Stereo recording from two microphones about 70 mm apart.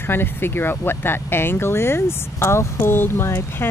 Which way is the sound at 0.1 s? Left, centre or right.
Left.